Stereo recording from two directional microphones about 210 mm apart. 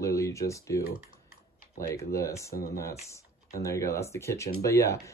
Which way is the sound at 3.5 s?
15° left (ahead or behind).